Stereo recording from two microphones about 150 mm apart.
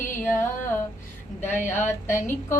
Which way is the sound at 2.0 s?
15° left (ahead or behind).